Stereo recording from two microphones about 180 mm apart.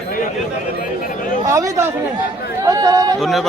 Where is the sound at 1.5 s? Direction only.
15° right (ahead or behind).